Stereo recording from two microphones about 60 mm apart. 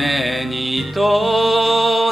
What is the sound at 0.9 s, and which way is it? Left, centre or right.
Music, centre.